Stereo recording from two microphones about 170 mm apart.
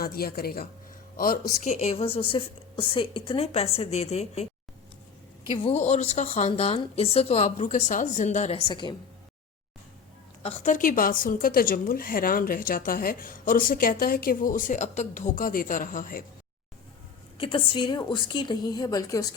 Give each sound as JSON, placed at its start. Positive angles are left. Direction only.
{"t": 0.0, "sound": "a woman's voice", "side_deg": 60}
{"t": 1.7, "sound": "speech", "side_deg": 40}
{"t": 5.7, "sound": "speech", "side_deg": 40}
{"t": 8.6, "sound": "a woman's voice", "side_deg": 25}
{"t": 10.6, "sound": "a woman's voice", "side_deg": 50}
{"t": 17.3, "sound": "a woman's voice", "side_deg": 30}